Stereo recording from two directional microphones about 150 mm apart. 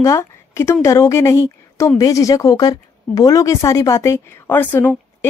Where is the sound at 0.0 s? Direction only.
20° left (ahead or behind).